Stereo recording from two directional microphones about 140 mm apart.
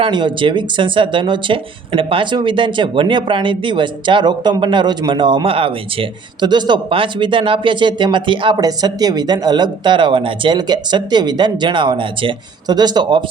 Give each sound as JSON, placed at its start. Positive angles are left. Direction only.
{"t": 0.0, "sound": "speech", "side_deg": -35}